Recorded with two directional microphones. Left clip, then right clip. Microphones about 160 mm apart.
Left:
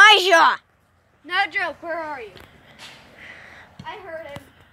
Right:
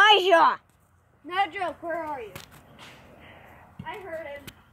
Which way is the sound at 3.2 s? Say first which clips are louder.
Left 8 dB; 5° right (ahead or behind).